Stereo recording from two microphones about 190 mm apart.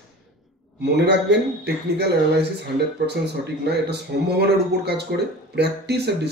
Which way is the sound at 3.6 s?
60° right (ahead or behind).